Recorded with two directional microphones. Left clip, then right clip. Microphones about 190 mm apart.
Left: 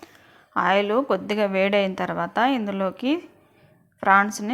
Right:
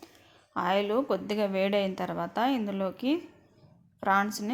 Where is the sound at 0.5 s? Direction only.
20° left (ahead or behind).